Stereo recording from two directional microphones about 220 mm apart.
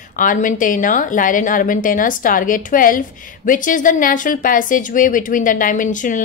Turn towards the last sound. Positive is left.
turn(degrees=35)  # may be behind; listen again after turning